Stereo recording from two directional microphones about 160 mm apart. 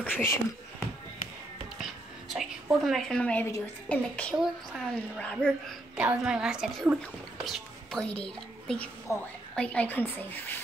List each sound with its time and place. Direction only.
0.0 s speech: 10° left (ahead or behind)
1.8 s a woman's voice: centre (ahead or behind)
5.9 s a child's voice: 5° right (ahead or behind)
9.1 s a woman's voice: 20° left (ahead or behind)